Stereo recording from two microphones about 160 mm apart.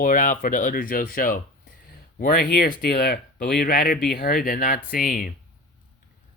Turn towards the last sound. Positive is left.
turn(degrees=65)  # may be behind; listen again after turning